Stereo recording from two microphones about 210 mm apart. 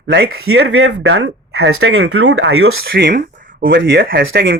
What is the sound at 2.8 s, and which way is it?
Speech, 45° right (ahead or behind).